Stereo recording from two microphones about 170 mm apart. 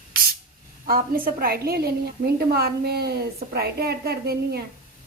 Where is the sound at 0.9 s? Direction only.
60° right (ahead or behind).